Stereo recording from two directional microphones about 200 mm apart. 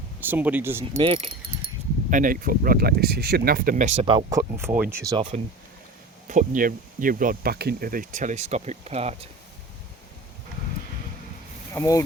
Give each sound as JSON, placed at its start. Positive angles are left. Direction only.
{"t": 0.2, "sound": "speech", "side_deg": -10}
{"t": 1.0, "sound": "speech", "side_deg": -25}
{"t": 2.0, "sound": "speech", "side_deg": -40}
{"t": 5.1, "sound": "speech", "side_deg": -25}
{"t": 6.2, "sound": "speech", "side_deg": -40}
{"t": 11.7, "sound": "speech", "side_deg": 15}